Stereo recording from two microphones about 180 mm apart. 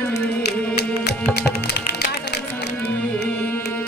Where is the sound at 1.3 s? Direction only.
65° left (ahead or behind).